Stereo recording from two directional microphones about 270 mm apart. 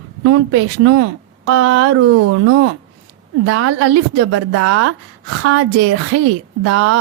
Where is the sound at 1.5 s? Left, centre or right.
Right.